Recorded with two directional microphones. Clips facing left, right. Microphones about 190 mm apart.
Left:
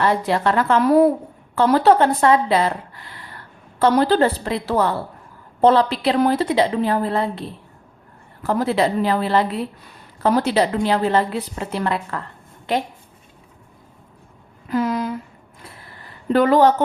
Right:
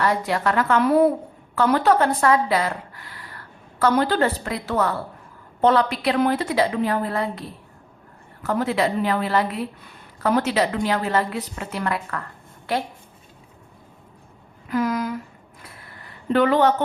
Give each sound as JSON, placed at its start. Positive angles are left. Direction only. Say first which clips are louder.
{"t": 0.0, "sound": "a woman's voice", "louder": "left 3 dB", "side_deg": 30}
{"t": 14.7, "sound": "a sound", "louder": "left 2 dB", "side_deg": 25}
{"t": 16.3, "sound": "a woman's voice", "louder": "left 3 dB", "side_deg": 40}